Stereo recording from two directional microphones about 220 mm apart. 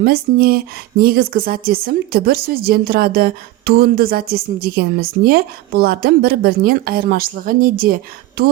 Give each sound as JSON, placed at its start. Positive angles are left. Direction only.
{"t": 0.0, "sound": "speech", "side_deg": -45}